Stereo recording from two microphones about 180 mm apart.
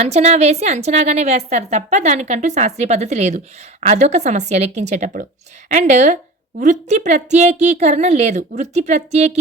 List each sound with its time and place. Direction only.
0.0 s a woman's voice: 40° right (ahead or behind)